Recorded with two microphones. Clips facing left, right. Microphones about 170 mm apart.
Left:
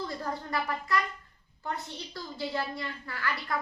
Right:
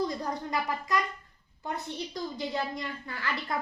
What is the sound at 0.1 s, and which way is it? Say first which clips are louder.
A woman's voice: right 1 dB; 20° right (ahead or behind).